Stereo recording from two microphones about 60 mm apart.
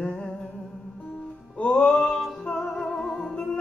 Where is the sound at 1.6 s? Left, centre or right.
Centre.